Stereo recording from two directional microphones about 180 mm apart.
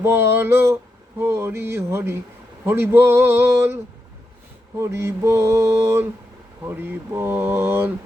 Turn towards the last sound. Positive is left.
turn(degrees=-10)  # may be behind; listen again after turning